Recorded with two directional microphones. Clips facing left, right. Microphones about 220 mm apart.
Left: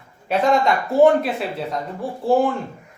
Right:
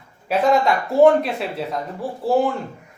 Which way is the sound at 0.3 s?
Centre (ahead or behind).